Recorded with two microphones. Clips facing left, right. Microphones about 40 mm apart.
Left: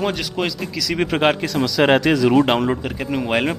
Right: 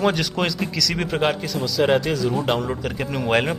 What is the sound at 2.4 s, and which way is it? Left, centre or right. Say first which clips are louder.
Speech: left 4 dB; left.